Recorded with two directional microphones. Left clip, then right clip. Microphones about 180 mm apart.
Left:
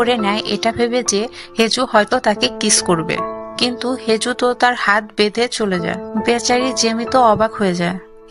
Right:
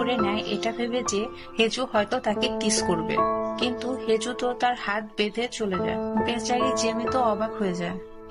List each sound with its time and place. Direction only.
0.0 s speech: 40° left (ahead or behind)